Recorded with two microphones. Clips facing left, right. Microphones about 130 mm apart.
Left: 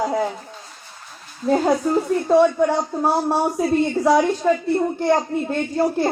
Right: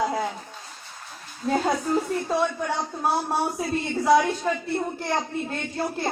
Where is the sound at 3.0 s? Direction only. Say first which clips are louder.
Left 4 dB; 30° left (ahead or behind).